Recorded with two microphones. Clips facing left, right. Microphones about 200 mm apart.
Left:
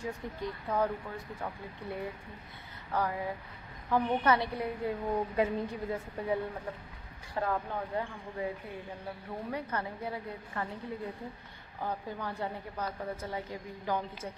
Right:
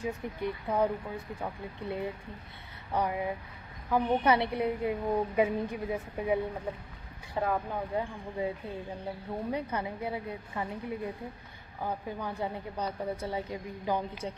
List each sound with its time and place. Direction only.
0.2 s a woman's voice: 15° right (ahead or behind)